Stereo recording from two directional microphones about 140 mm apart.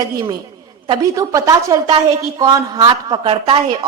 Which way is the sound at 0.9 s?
25° right (ahead or behind).